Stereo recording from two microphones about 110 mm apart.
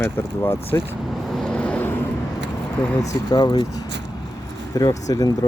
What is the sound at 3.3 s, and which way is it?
Speech, 40° left (ahead or behind).